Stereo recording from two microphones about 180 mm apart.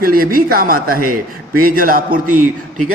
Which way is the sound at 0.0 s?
55° right (ahead or behind).